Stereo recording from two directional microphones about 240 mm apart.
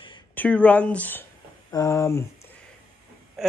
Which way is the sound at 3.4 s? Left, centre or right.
Centre.